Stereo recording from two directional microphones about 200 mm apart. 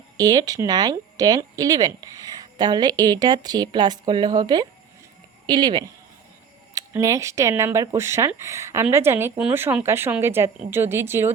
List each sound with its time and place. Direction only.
0.2 s speech: 20° right (ahead or behind)